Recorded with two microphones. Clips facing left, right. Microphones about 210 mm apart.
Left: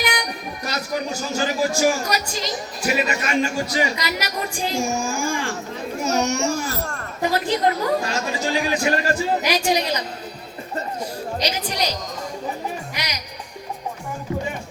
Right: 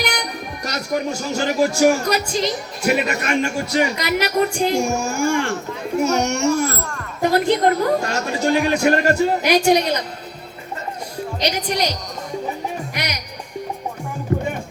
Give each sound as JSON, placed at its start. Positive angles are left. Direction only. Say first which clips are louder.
{"t": 0.6, "sound": "a child's voice", "louder": "right 4 dB", "side_deg": -70}
{"t": 11.4, "sound": "speech", "louder": "right 5 dB", "side_deg": -60}
{"t": 13.0, "sound": "music", "louder": "right 4 dB", "side_deg": -60}
{"t": 14.3, "sound": "music", "louder": "right 5 dB", "side_deg": -55}